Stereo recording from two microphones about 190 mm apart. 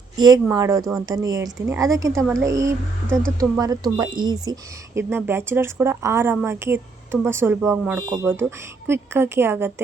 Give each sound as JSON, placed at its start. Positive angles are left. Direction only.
{"t": 0.2, "sound": "a woman's voice", "side_deg": -20}